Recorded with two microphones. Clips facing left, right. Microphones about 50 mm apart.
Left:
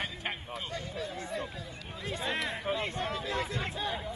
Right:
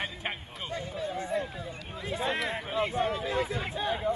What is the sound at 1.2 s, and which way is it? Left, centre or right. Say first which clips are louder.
Run: right 5 dB; centre.